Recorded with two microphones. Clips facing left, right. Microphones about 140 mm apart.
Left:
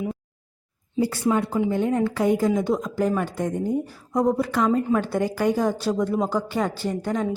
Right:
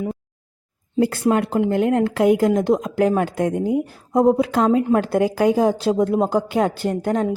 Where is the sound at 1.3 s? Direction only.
70° right (ahead or behind); by 3.8 s 90° right.